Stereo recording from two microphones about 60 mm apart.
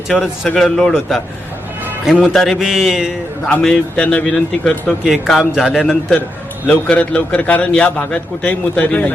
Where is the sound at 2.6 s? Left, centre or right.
Centre.